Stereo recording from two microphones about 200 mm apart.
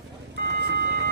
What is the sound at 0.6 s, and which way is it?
Vehicle, 55° right (ahead or behind).